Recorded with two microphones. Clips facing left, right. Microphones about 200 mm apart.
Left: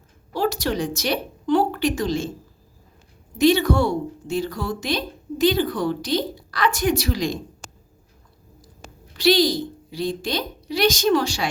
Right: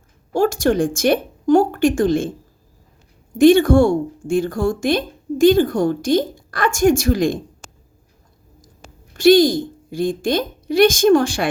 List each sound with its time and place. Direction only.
0.3 s a woman's voice: 50° right (ahead or behind)
3.3 s a woman's voice: 50° right (ahead or behind)
9.1 s a woman's voice: 50° right (ahead or behind)